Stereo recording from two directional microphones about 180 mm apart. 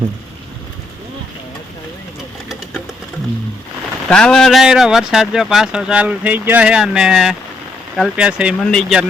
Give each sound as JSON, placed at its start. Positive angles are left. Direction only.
{"t": 4.1, "sound": "speech", "side_deg": 5}